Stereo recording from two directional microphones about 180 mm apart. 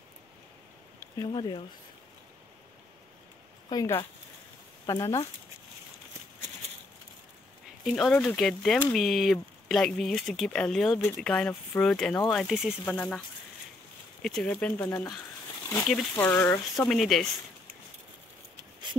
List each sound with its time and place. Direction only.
0.9 s speech: 20° left (ahead or behind)
4.8 s speech: 15° left (ahead or behind)
7.8 s speech: centre (ahead or behind)
14.2 s speech: 5° left (ahead or behind)